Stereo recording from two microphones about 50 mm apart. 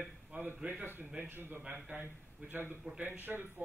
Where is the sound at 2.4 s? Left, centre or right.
Right.